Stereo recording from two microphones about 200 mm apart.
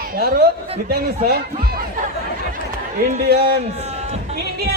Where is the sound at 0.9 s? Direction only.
50° right (ahead or behind).